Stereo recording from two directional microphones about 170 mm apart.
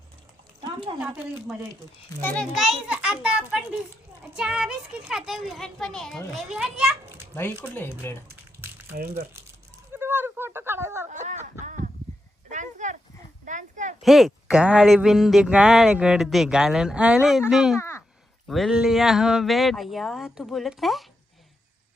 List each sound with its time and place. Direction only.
0.9 s a woman's voice: 10° right (ahead or behind)
2.2 s a child's voice: 5° left (ahead or behind)
7.6 s speech: 10° left (ahead or behind)
8.6 s crumpling: 10° right (ahead or behind)
9.9 s a sound: 15° right (ahead or behind)
11.1 s a sound: 45° right (ahead or behind)
14.0 s a child's voice: centre (ahead or behind)
17.7 s a sound: 15° left (ahead or behind)
18.4 s a child's voice: centre (ahead or behind)